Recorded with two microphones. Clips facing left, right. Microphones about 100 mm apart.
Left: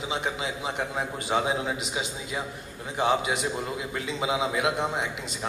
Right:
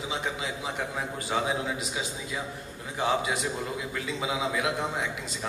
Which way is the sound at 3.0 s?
20° left (ahead or behind).